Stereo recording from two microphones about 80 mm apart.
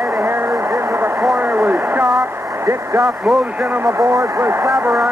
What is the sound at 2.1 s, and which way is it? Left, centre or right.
Speech, right.